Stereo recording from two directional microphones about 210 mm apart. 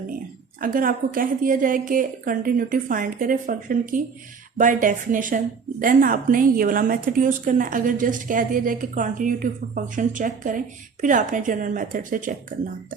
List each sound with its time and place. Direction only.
0.6 s a woman's voice: 40° right (ahead or behind)